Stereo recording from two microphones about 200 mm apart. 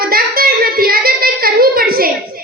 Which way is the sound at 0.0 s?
50° right (ahead or behind).